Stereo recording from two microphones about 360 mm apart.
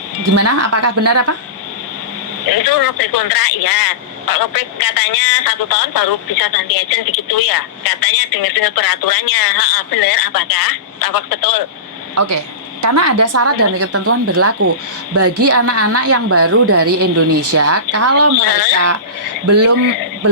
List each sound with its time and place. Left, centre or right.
0.3 s speech: right
2.5 s speech: left
12.1 s a woman's voice: right
19.5 s speech: right